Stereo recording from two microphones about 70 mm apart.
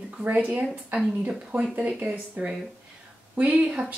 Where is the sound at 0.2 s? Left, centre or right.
Centre.